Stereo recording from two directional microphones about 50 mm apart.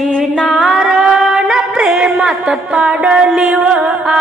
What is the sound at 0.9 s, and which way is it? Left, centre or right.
Music, right.